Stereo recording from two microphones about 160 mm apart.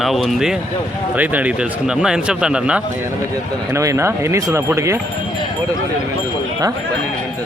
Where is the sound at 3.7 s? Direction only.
20° right (ahead or behind).